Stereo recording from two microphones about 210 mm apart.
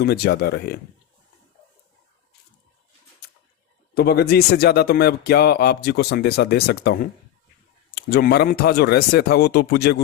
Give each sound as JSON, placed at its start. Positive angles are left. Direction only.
{"t": 0.0, "sound": "a man's voice", "side_deg": 50}
{"t": 3.9, "sound": "a man's voice", "side_deg": 50}